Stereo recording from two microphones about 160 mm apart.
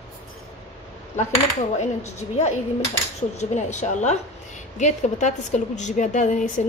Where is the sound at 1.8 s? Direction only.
45° left (ahead or behind).